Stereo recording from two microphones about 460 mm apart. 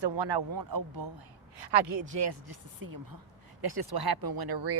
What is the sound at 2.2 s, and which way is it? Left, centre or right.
Speech, right.